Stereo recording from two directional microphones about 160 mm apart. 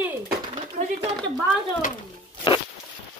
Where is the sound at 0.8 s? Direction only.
50° right (ahead or behind).